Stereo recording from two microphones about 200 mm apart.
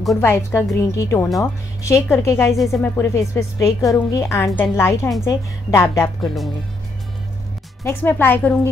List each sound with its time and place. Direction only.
0.2 s speech: 10° left (ahead or behind)
6.2 s speech: centre (ahead or behind)
7.8 s speech: 10° left (ahead or behind)